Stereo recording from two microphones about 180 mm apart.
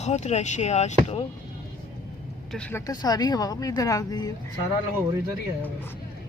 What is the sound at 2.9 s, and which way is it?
Speech, 20° left (ahead or behind).